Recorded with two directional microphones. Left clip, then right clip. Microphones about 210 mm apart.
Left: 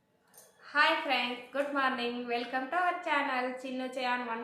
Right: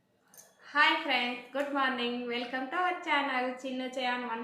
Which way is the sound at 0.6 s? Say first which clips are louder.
Right 1 dB; 10° left (ahead or behind).